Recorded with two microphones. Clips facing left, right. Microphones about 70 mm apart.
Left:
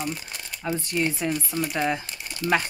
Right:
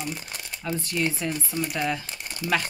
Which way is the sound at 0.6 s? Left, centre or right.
Left.